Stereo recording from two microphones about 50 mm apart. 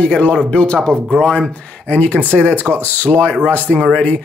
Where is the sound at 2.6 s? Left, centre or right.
Left.